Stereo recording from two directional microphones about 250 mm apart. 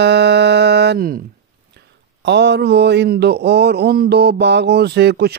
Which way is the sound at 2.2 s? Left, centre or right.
Right.